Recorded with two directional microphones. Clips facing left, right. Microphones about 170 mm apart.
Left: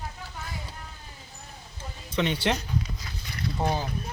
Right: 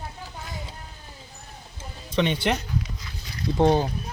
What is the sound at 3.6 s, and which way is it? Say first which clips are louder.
Speech: right 9 dB; 65° right (ahead or behind).